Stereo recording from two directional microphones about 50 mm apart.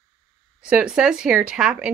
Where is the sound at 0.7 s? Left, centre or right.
Right.